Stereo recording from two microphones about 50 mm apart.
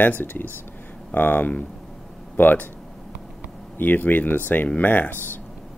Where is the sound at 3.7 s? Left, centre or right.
Left.